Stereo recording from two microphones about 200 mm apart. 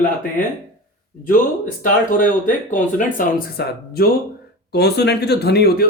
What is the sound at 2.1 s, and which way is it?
Speech, 40° left (ahead or behind).